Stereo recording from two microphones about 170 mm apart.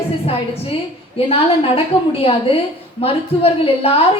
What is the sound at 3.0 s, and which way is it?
Speech, 35° left (ahead or behind).